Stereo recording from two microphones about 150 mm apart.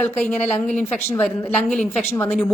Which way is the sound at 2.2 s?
5° left (ahead or behind).